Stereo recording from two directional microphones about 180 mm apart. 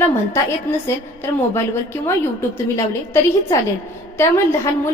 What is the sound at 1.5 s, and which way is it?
A woman's voice, 15° left (ahead or behind).